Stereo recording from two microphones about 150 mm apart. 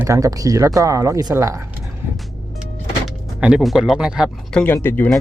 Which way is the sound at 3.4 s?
5° right (ahead or behind).